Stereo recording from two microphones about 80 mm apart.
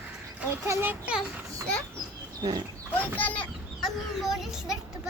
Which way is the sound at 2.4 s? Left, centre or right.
Right.